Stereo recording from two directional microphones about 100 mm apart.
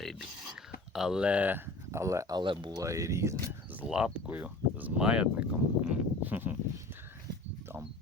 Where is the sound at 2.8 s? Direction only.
30° right (ahead or behind).